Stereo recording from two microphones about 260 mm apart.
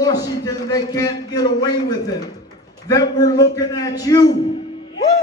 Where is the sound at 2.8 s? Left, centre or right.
Centre.